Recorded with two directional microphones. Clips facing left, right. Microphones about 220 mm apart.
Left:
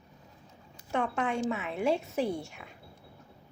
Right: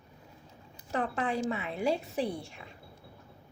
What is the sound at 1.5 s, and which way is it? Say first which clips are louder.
A woman's voice: left 1 dB; centre (ahead or behind).